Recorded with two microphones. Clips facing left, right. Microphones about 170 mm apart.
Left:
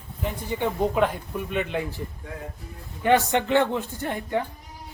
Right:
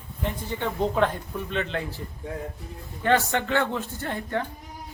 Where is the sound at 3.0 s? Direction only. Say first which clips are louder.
Left 2 dB; 20° left (ahead or behind).